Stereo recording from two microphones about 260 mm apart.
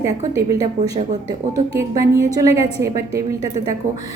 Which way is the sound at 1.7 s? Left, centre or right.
Centre.